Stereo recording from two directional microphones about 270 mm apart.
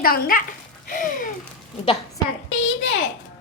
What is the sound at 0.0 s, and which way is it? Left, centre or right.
Speech, left.